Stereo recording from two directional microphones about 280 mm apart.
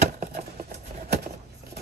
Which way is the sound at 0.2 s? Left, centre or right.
Right.